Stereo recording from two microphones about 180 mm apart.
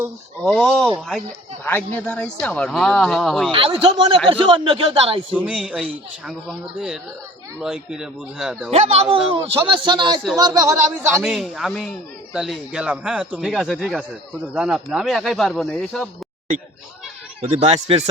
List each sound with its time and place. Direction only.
0.4 s speech: 5° left (ahead or behind)
3.5 s a man's voice: 30° right (ahead or behind)
5.3 s speech: 5° right (ahead or behind)
8.7 s a man's voice: 35° right (ahead or behind); by 11.2 s 15° right (ahead or behind)
11.2 s speech: 5° right (ahead or behind)
17.4 s a man's voice: 30° right (ahead or behind)